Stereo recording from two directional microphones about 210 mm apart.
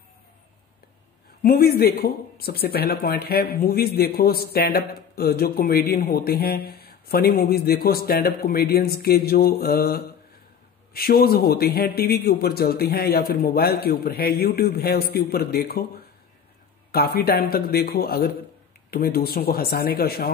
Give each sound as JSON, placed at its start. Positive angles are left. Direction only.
{"t": 1.4, "sound": "speech", "side_deg": 45}
{"t": 16.9, "sound": "speech", "side_deg": 45}